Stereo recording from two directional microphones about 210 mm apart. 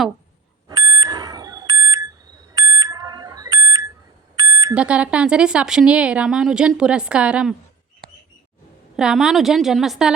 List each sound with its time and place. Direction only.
0.7 s smoke detector: 15° right (ahead or behind)
1.8 s alarm: 15° right (ahead or behind)
4.4 s smoke detector: 15° right (ahead or behind)
4.7 s speech: 5° right (ahead or behind)
9.0 s speech: 5° right (ahead or behind)